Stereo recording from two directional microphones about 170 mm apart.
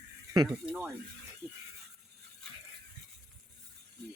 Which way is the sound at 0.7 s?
10° right (ahead or behind).